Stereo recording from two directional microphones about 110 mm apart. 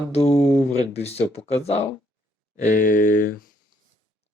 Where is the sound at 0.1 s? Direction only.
70° left (ahead or behind).